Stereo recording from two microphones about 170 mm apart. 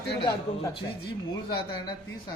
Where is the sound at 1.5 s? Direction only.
30° left (ahead or behind).